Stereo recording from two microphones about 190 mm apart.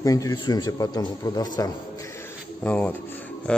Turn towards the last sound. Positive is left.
turn(degrees=5)  # may be behind; listen again after turning